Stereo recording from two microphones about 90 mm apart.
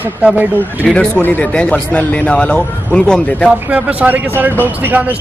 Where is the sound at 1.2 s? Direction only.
20° left (ahead or behind).